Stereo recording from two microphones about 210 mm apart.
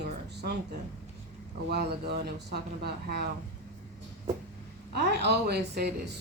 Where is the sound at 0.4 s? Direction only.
50° right (ahead or behind).